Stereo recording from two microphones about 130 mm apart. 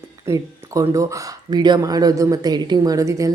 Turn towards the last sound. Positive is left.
turn(degrees=-25)  # may be behind; listen again after turning